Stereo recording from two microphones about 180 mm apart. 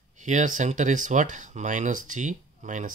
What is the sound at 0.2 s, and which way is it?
Speech, 45° right (ahead or behind).